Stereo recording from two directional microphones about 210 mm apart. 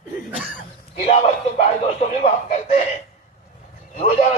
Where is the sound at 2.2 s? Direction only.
30° left (ahead or behind).